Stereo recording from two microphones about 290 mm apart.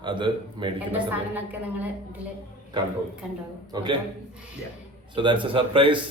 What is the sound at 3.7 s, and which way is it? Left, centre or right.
Speech, centre.